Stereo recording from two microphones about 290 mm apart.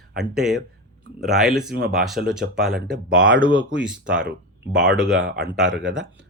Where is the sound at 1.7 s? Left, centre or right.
Right.